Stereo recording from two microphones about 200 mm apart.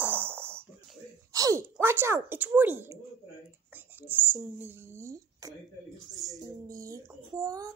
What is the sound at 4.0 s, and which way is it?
Speech, 10° right (ahead or behind).